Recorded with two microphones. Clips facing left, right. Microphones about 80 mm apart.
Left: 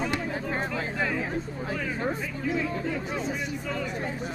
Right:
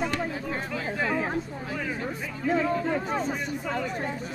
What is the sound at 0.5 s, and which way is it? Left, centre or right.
Chatter, left.